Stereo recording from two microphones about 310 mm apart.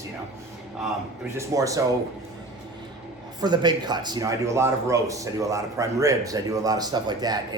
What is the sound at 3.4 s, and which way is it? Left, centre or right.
A man's voice, centre.